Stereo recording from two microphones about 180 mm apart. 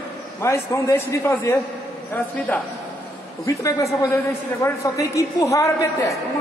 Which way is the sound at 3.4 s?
15° left (ahead or behind).